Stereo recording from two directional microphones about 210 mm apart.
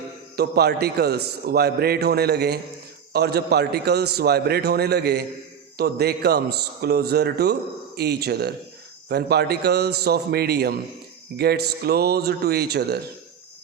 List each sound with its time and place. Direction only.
0.3 s a man's voice: 50° right (ahead or behind)